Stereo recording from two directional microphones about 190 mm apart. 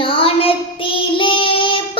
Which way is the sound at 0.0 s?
30° left (ahead or behind).